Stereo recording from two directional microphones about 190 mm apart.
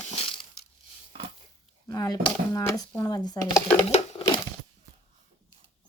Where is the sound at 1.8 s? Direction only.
20° left (ahead or behind).